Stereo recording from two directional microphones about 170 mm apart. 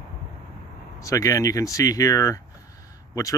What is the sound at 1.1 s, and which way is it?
Speech, 20° left (ahead or behind).